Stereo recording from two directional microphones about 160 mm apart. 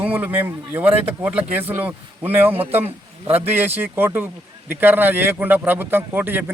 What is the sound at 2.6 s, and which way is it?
Speech, 40° right (ahead or behind).